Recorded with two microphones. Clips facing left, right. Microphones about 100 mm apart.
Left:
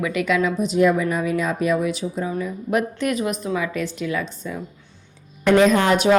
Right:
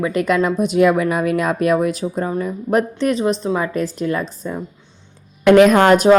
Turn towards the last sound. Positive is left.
turn(degrees=-40)  # may be behind; listen again after turning